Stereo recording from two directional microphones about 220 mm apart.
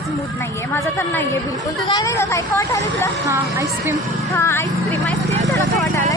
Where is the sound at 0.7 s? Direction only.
10° left (ahead or behind).